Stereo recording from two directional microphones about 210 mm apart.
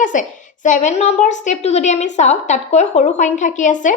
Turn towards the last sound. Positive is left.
turn(degrees=35)  # may be behind; listen again after turning